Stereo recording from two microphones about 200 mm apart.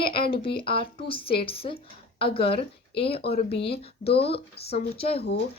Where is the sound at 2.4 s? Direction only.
55° left (ahead or behind).